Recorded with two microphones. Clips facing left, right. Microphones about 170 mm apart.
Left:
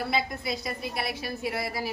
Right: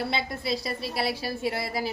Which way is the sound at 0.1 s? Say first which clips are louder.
Even; 30° right (ahead or behind).